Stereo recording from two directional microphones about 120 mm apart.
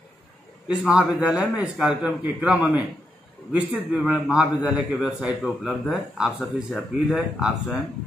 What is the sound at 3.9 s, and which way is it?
A man's voice, 5° right (ahead or behind).